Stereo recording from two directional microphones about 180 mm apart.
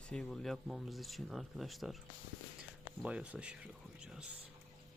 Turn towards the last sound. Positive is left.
turn(degrees=-5)  # may be behind; listen again after turning